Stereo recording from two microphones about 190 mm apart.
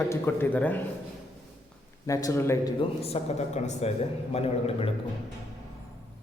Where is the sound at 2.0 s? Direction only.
20° left (ahead or behind).